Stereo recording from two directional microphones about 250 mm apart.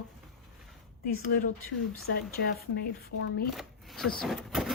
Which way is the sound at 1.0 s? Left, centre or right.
Left.